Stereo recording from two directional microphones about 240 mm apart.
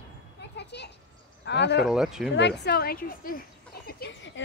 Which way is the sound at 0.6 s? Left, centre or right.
Left.